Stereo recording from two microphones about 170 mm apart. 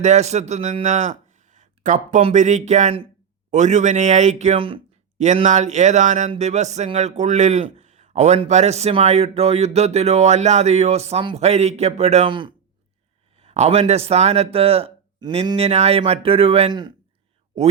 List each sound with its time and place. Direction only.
0.0 s speech: 40° right (ahead or behind)
1.5 s a sound: 45° right (ahead or behind)
2.2 s a man's voice: 45° right (ahead or behind)
5.2 s speech: 45° right (ahead or behind); by 16.9 s 30° right (ahead or behind)